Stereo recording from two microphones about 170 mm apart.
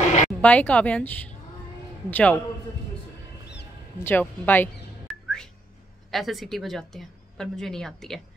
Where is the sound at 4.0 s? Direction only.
10° left (ahead or behind).